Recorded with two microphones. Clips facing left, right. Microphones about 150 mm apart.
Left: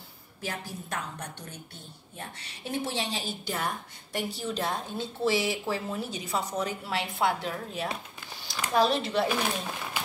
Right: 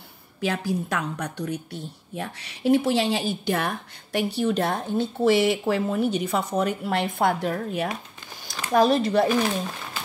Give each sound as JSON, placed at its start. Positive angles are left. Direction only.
{"t": 0.4, "sound": "a woman's voice", "side_deg": -75}